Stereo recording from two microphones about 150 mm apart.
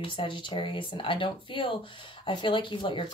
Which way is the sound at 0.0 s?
35° left (ahead or behind).